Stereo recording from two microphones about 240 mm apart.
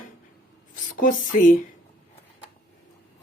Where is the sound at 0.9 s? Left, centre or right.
Left.